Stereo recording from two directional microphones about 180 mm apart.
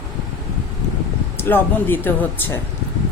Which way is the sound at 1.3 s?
10° left (ahead or behind).